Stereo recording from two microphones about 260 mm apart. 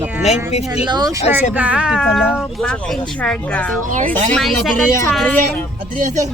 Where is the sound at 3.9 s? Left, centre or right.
Right.